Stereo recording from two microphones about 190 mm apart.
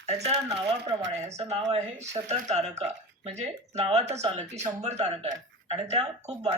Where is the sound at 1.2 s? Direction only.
35° right (ahead or behind).